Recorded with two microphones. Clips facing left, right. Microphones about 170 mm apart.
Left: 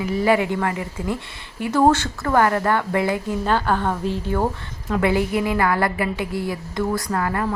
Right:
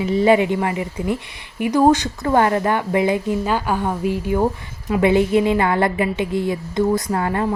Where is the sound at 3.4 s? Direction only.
10° right (ahead or behind).